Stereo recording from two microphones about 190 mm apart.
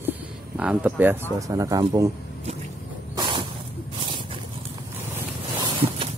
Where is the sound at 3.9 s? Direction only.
25° right (ahead or behind).